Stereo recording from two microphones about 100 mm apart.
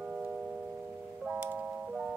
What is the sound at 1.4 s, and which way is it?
Music, 15° right (ahead or behind).